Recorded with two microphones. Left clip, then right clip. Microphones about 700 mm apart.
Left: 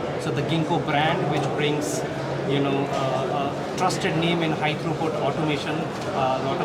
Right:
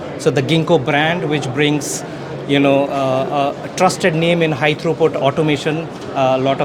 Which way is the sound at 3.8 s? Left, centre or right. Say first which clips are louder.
Right 10 dB; right.